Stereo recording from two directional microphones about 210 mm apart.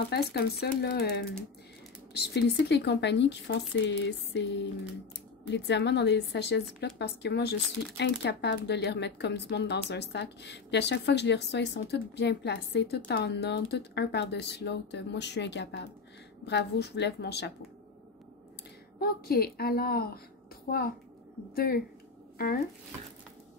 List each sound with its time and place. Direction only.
0.1 s speech: 50° left (ahead or behind)
18.9 s speech: 45° left (ahead or behind)